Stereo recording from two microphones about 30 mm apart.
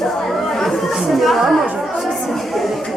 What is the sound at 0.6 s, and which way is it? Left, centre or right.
Chatter, centre.